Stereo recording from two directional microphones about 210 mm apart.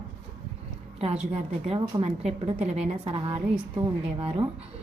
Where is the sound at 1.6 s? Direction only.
25° right (ahead or behind).